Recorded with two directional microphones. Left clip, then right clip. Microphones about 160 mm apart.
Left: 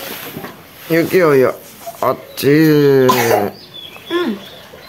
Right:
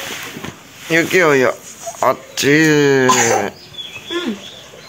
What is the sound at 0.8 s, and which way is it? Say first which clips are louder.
Speech: even; 10° left (ahead or behind).